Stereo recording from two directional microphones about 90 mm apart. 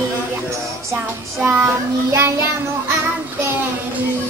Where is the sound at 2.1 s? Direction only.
30° right (ahead or behind).